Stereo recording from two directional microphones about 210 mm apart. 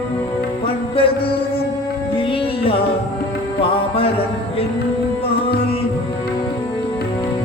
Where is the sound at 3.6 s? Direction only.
25° left (ahead or behind).